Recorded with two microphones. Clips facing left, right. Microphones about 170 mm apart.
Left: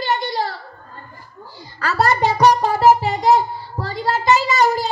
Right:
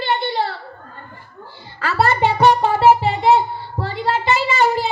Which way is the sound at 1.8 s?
40° left (ahead or behind).